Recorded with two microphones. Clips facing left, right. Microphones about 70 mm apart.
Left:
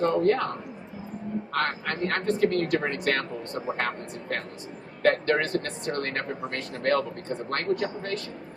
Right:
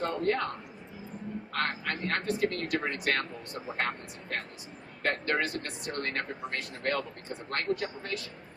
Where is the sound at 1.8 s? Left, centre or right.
Left.